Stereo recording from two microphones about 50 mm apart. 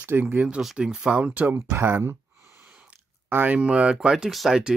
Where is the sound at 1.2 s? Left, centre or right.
Right.